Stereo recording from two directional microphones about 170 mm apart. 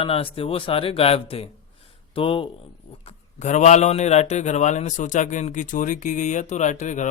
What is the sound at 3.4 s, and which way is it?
A man's voice, 45° left (ahead or behind).